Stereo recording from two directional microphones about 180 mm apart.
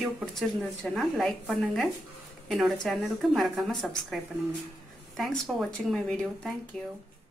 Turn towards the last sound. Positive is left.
turn(degrees=5)  # may be behind; listen again after turning